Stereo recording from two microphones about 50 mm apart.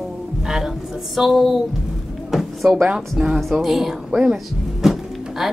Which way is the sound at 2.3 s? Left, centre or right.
Centre.